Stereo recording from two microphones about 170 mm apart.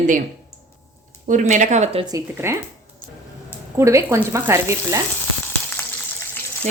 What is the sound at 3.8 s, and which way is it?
Speech, 15° right (ahead or behind).